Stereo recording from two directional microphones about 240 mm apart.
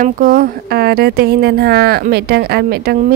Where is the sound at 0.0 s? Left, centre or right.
Right.